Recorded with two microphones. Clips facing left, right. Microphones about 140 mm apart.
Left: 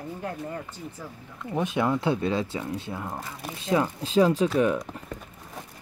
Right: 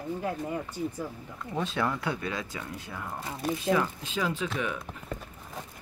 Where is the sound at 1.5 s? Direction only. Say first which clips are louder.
Left 5 dB; 20° left (ahead or behind); by 4.5 s 35° left (ahead or behind).